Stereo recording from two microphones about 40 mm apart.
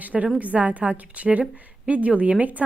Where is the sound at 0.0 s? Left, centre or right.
Right.